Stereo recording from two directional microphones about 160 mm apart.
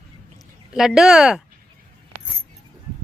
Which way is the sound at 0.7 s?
5° right (ahead or behind).